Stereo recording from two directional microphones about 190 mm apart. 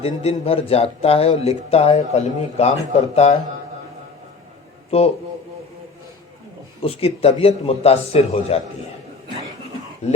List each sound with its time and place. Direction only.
0.0 s speech: 30° left (ahead or behind)
4.9 s speech: 30° left (ahead or behind)
6.8 s speech: 30° left (ahead or behind)
10.0 s speech: 35° left (ahead or behind)